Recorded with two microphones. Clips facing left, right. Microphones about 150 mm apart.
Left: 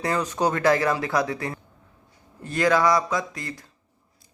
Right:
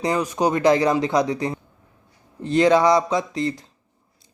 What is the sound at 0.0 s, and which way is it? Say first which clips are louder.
Speech: right 3 dB; 15° right (ahead or behind).